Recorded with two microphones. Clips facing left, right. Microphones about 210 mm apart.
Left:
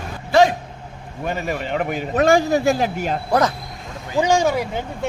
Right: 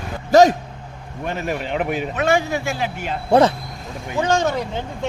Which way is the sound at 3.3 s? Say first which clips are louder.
Right 5 dB; 30° right (ahead or behind).